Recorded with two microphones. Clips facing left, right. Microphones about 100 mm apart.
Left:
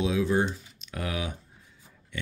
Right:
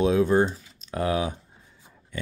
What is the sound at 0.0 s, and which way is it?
Speech, 45° right (ahead or behind).